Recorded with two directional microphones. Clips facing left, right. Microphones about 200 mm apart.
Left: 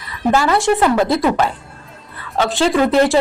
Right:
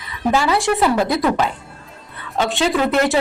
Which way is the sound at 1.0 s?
25° left (ahead or behind).